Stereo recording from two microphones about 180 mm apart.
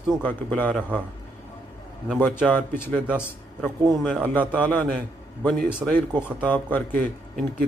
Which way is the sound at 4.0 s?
5° left (ahead or behind).